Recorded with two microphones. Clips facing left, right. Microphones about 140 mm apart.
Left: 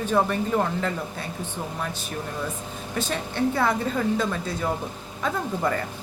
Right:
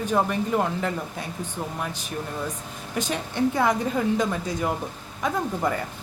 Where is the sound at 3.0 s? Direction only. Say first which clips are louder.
Right 1 dB; 15° right (ahead or behind).